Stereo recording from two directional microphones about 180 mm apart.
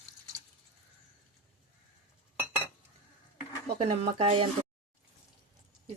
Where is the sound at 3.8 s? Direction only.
35° right (ahead or behind).